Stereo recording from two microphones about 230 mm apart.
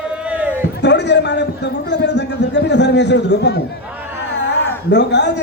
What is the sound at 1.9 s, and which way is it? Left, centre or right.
A man's voice, left.